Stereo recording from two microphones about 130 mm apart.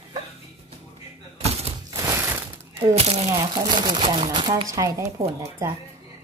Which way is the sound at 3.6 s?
30° right (ahead or behind).